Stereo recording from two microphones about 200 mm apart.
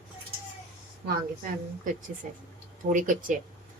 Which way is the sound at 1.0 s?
40° right (ahead or behind).